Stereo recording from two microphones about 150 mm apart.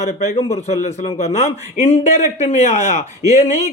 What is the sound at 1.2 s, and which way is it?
A man's voice, 45° left (ahead or behind).